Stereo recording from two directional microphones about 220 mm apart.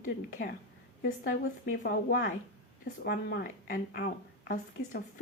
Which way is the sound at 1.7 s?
40° left (ahead or behind).